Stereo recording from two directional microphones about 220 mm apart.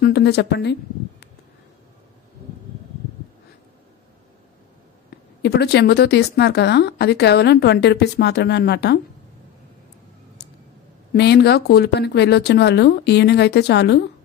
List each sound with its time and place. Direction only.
0.0 s speech: 50° left (ahead or behind)
5.4 s speech: 45° left (ahead or behind)
11.1 s speech: 50° left (ahead or behind)